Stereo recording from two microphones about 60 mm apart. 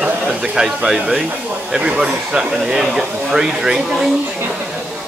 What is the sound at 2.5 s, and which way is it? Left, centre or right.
Speech, centre.